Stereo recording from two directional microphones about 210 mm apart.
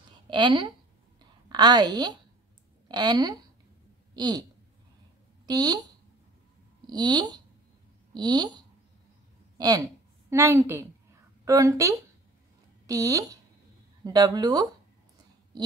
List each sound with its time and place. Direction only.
0.3 s speech: 20° right (ahead or behind)
4.1 s a sound: 20° right (ahead or behind)
5.5 s speech: 20° right (ahead or behind)
6.9 s a woman's voice: 20° right (ahead or behind)